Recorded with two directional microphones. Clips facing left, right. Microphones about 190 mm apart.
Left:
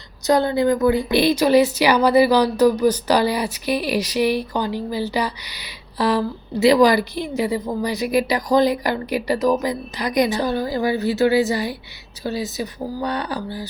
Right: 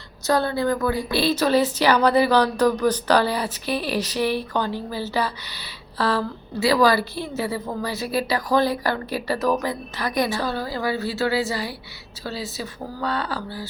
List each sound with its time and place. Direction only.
0.3 s a woman's voice: 15° left (ahead or behind)